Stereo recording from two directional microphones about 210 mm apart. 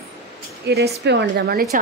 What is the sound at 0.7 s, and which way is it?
Speech, 55° right (ahead or behind).